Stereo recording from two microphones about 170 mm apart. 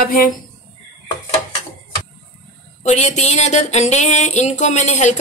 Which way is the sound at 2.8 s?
40° left (ahead or behind).